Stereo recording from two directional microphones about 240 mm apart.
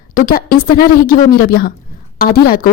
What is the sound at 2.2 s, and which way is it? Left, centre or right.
Speech, left.